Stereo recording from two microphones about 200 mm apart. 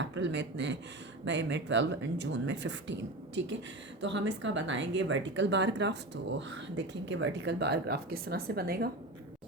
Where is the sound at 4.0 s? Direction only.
65° right (ahead or behind).